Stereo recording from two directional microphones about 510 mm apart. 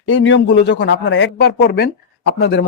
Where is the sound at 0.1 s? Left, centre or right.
Left.